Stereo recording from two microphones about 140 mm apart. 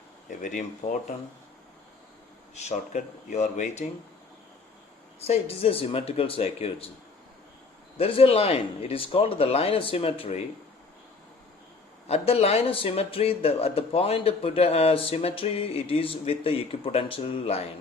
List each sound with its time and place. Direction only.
0.3 s speech: 65° left (ahead or behind)
2.6 s speech: 55° left (ahead or behind)
5.2 s speech: 45° left (ahead or behind)
7.9 s speech: 45° left (ahead or behind)
12.0 s speech: 45° left (ahead or behind)